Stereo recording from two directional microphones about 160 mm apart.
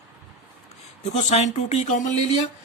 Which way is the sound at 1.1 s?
45° left (ahead or behind).